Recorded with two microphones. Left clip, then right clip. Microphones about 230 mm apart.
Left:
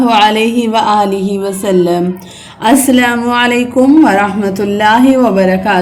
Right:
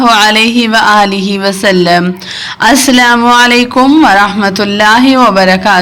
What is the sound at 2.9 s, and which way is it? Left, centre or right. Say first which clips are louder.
A woman's voice: right 6 dB; right.